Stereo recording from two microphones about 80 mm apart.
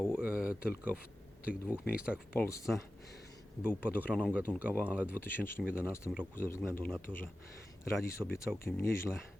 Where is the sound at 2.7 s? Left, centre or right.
Centre.